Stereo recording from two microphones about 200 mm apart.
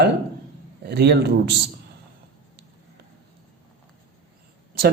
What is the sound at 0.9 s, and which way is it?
Speech, 55° right (ahead or behind).